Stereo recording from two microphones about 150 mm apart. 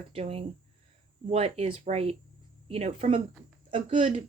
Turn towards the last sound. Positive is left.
turn(degrees=-40)  # may be behind; listen again after turning